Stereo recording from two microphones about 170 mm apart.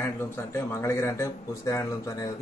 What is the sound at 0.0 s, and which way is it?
Speech, 15° left (ahead or behind).